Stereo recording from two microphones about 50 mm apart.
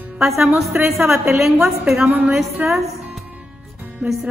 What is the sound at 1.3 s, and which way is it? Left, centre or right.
A woman's voice, centre.